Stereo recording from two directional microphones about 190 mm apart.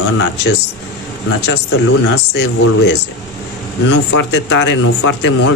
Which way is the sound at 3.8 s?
70° left (ahead or behind).